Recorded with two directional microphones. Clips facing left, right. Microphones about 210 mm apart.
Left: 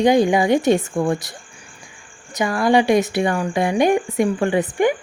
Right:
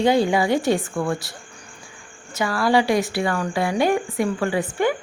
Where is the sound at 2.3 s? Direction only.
20° left (ahead or behind).